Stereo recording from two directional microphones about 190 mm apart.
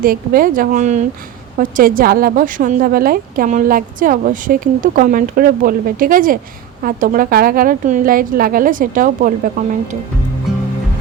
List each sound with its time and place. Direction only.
0.0 s a woman's voice: 50° right (ahead or behind)